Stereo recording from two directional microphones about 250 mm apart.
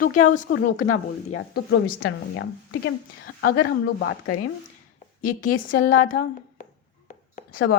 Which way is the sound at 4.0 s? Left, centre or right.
Left.